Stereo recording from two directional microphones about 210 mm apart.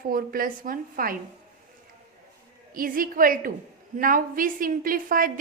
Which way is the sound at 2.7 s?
40° right (ahead or behind).